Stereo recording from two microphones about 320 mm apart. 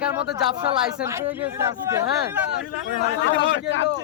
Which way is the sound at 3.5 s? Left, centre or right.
Left.